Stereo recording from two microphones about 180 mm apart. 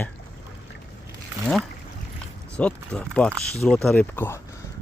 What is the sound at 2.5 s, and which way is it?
Speech, 5° left (ahead or behind).